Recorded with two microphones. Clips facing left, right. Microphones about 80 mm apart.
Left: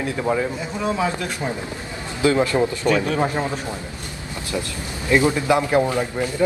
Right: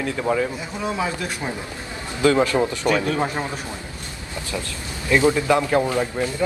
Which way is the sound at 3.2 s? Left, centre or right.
Left.